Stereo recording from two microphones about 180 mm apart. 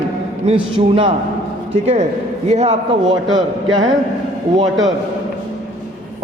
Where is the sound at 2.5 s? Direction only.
40° right (ahead or behind).